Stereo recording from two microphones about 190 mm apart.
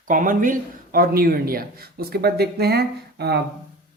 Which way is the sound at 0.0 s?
45° right (ahead or behind).